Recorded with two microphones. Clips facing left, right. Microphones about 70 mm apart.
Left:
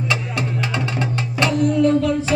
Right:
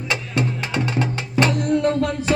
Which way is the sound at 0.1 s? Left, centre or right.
Right.